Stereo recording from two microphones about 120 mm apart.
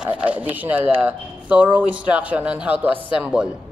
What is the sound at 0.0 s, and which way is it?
Speech, 10° right (ahead or behind).